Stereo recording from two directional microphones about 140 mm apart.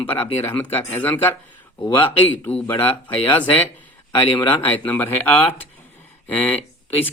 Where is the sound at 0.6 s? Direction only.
15° left (ahead or behind).